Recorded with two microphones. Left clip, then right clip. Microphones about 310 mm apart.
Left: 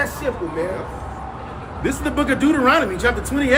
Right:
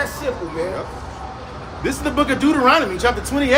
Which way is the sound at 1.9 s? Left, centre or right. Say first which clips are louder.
Right 1 dB; centre.